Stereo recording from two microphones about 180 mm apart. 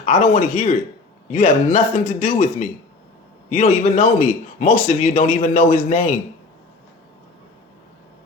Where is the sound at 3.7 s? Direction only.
35° left (ahead or behind).